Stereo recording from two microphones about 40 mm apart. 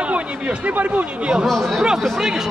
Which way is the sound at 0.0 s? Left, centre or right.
Right.